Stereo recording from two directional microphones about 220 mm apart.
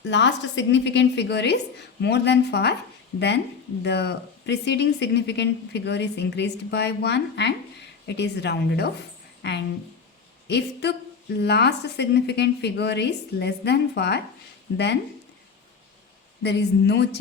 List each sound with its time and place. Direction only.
0.0 s speech: 55° left (ahead or behind)
16.4 s speech: 50° left (ahead or behind)